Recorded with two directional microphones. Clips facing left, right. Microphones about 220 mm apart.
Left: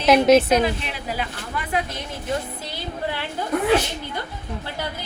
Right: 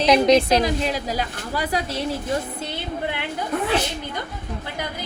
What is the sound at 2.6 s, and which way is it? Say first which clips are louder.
Music: right 1 dB; 20° right (ahead or behind).